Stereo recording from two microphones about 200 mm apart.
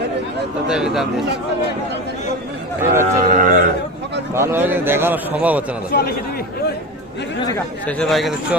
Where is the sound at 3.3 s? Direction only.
40° right (ahead or behind).